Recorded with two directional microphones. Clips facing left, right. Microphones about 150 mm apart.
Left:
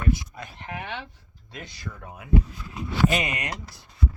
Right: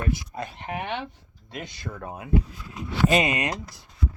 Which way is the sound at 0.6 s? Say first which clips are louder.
Right 3 dB; 20° right (ahead or behind).